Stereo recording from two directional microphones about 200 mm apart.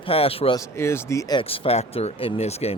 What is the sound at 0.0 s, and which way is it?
Speech, 30° left (ahead or behind).